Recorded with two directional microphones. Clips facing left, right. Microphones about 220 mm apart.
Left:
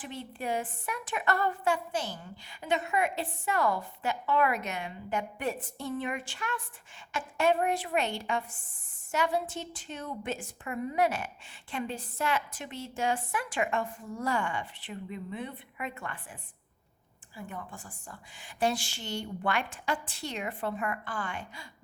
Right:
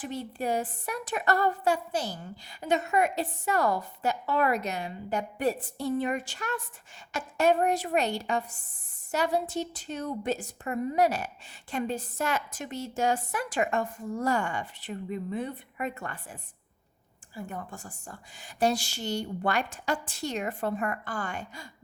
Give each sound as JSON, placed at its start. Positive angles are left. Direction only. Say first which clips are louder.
{"t": 0.0, "sound": "a woman's voice", "louder": "right 5 dB", "side_deg": -40}